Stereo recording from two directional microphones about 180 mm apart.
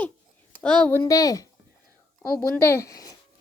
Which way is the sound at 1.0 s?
20° left (ahead or behind).